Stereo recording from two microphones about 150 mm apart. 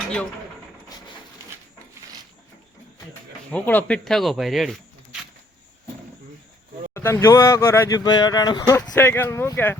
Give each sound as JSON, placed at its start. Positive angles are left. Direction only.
{"t": 3.5, "sound": "speech", "side_deg": 10}
{"t": 6.9, "sound": "speech", "side_deg": 20}